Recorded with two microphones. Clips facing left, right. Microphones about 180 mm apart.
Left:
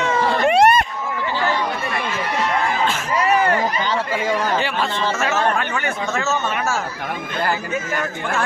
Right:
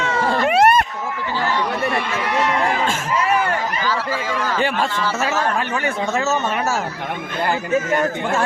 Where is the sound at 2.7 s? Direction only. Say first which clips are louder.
Even; 45° right (ahead or behind).